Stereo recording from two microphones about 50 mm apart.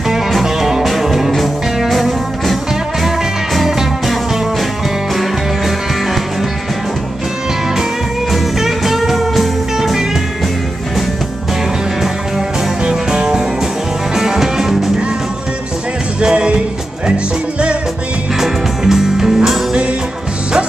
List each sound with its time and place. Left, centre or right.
0.1 s music: centre
3.5 s music: centre
8.3 s music: centre
12.8 s music: centre
16.2 s music: centre
18.4 s music: centre